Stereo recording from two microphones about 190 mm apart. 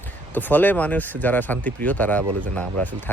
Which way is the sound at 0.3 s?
10° left (ahead or behind).